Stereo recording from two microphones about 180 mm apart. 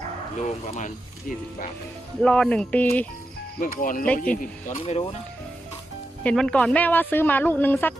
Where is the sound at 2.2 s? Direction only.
5° left (ahead or behind).